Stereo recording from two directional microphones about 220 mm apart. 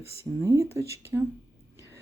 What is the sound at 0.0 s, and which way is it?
Speech, 25° left (ahead or behind).